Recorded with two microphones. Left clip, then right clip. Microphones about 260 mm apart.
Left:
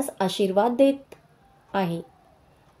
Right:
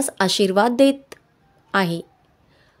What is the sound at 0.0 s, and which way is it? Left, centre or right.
A woman's voice, right.